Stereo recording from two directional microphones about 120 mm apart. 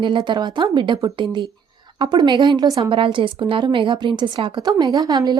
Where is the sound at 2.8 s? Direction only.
45° right (ahead or behind).